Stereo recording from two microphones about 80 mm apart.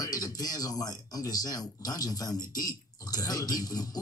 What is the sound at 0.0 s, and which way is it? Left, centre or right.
Speech, left.